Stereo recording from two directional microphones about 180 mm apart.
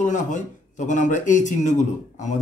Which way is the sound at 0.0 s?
45° left (ahead or behind).